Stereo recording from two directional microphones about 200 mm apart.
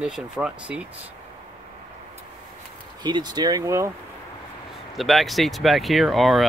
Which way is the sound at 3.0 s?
20° right (ahead or behind).